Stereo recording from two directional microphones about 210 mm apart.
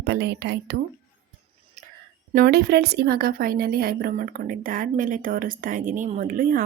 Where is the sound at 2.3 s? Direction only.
45° right (ahead or behind).